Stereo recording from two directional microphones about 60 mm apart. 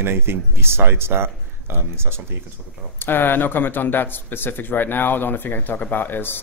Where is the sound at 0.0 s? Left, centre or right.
Right.